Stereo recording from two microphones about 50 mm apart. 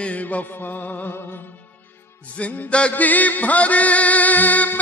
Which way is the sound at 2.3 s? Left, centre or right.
Left.